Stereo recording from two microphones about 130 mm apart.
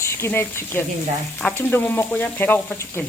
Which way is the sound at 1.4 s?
10° left (ahead or behind).